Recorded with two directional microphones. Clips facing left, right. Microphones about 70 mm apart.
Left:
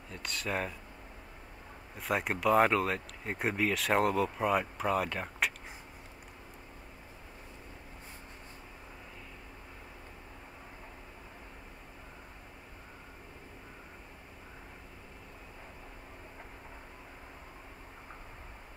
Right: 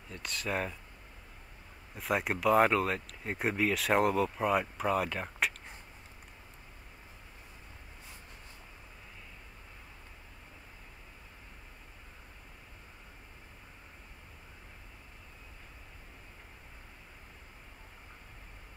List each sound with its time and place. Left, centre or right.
0.1 s speech: centre
2.0 s speech: centre